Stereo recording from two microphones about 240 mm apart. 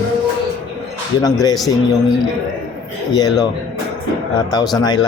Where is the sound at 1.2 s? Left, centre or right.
Centre.